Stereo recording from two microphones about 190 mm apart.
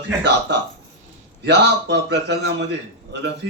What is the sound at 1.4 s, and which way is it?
A man's voice, 65° right (ahead or behind).